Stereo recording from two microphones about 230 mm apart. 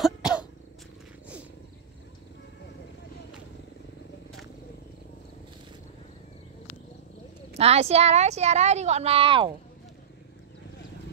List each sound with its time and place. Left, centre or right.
0.0 s cough: centre
7.5 s a woman's voice: right